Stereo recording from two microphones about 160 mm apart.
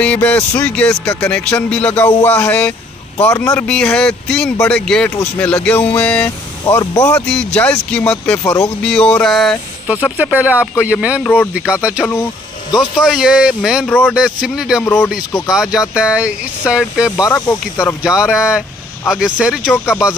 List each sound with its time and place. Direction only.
0.0 s speech: 10° left (ahead or behind)
3.6 s speech: 5° left (ahead or behind)
6.6 s speech: 25° left (ahead or behind)
7.2 s speech: 5° left (ahead or behind)
13.8 s speech: 10° left (ahead or behind)
14.1 s speech: 5° right (ahead or behind)
17.2 s speech: 20° left (ahead or behind)
19.0 s speech: 5° right (ahead or behind)
19.7 s speech: 15° left (ahead or behind)